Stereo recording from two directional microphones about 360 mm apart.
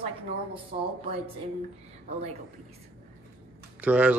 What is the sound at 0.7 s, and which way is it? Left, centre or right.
Speech, right.